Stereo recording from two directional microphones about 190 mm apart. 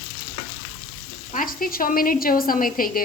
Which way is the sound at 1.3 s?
45° left (ahead or behind).